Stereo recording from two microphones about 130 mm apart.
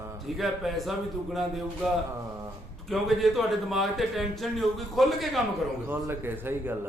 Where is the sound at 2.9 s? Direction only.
Centre (ahead or behind).